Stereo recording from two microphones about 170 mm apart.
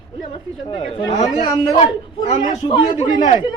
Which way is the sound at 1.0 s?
25° left (ahead or behind).